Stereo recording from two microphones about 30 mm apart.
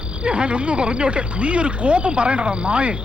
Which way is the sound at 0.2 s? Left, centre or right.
Right.